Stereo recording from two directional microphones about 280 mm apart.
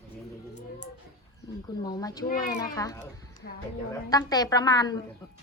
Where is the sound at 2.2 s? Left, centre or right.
Left.